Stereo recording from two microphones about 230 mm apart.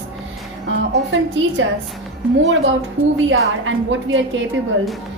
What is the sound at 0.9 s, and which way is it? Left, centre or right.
Speech, right.